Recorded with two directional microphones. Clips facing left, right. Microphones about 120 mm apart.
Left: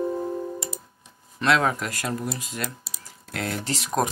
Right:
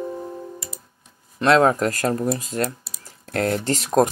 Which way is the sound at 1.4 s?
35° right (ahead or behind).